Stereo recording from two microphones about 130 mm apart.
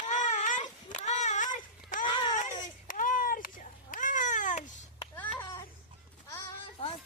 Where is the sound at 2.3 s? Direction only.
70° left (ahead or behind).